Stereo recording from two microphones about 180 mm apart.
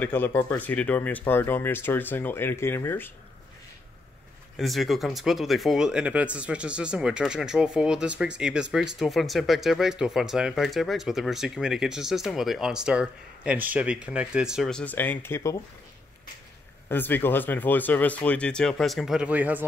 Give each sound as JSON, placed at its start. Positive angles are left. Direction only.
{"t": 0.0, "sound": "speech", "side_deg": 10}
{"t": 4.6, "sound": "speech", "side_deg": 0}
{"t": 16.9, "sound": "speech", "side_deg": 10}